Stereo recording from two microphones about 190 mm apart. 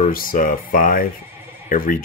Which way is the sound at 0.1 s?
45° left (ahead or behind).